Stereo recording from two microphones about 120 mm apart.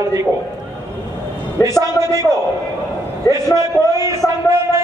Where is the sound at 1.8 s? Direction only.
25° right (ahead or behind).